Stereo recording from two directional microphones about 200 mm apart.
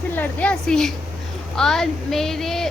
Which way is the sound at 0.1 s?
10° left (ahead or behind).